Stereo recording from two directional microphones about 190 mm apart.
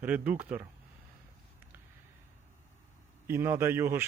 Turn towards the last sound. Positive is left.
turn(degrees=-15)  # may be behind; listen again after turning